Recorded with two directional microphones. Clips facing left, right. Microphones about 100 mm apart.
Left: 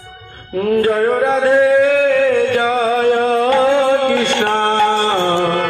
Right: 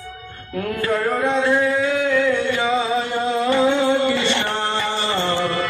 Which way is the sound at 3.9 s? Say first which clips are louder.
Left 4 dB; 75° left (ahead or behind).